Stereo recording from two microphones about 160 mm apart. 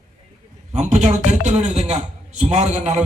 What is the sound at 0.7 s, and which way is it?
A man's voice, 45° right (ahead or behind).